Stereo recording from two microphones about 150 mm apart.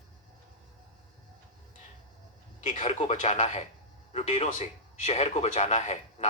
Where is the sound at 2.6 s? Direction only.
50° left (ahead or behind).